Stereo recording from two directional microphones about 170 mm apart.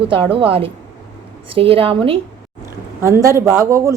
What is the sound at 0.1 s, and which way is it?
Speech, 30° right (ahead or behind).